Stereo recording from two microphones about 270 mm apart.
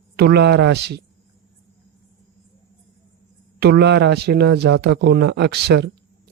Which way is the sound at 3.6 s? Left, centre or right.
Right.